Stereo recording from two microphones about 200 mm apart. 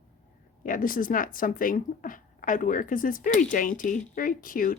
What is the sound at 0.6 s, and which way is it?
Speech, 45° left (ahead or behind).